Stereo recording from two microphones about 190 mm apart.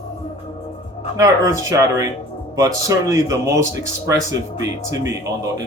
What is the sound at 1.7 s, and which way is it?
Speech, 15° right (ahead or behind).